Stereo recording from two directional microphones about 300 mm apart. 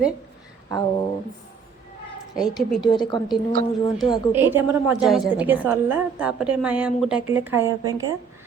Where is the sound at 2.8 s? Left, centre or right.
Centre.